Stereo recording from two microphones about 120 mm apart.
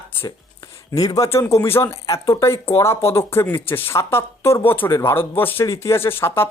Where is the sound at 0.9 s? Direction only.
30° left (ahead or behind).